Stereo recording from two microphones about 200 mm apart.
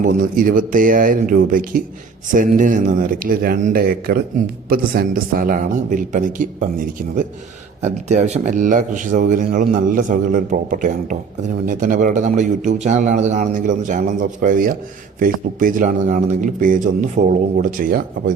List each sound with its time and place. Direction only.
0.0 s speech: 45° right (ahead or behind)
8.0 s speech: 35° right (ahead or behind)